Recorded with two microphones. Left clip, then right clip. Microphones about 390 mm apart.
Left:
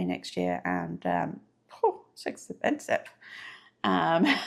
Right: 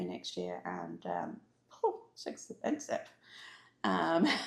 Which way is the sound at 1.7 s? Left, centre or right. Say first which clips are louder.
Left 7 dB; left.